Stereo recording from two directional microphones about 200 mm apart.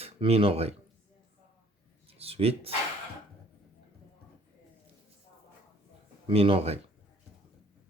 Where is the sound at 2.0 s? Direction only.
30° right (ahead or behind).